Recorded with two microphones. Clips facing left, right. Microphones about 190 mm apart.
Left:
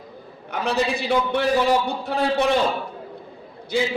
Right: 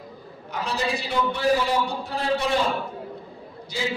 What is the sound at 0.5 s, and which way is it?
Speech, 60° left (ahead or behind).